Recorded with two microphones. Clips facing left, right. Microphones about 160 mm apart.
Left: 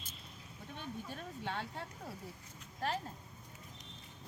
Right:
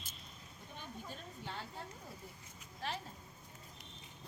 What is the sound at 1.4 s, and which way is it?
Speech, 65° left (ahead or behind).